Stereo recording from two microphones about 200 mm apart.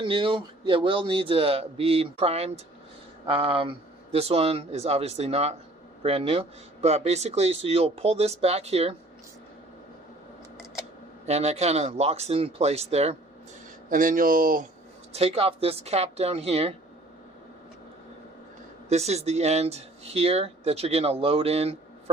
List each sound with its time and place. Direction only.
0.0 s a man's voice: 25° right (ahead or behind)
11.3 s speech: 35° right (ahead or behind)
13.9 s speech: 40° right (ahead or behind)
15.1 s speech: 30° right (ahead or behind)
18.9 s speech: 35° right (ahead or behind)